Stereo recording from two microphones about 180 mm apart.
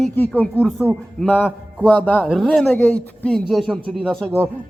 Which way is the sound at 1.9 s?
10° left (ahead or behind).